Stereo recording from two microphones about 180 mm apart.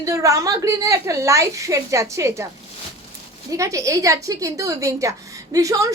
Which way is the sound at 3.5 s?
15° right (ahead or behind).